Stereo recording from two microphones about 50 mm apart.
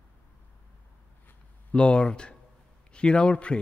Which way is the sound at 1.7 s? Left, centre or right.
Left.